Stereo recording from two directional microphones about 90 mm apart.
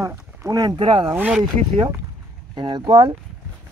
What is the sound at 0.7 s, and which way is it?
Speech, 70° right (ahead or behind).